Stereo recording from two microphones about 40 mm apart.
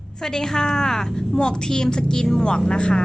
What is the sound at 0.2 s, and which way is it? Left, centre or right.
A woman's voice, centre.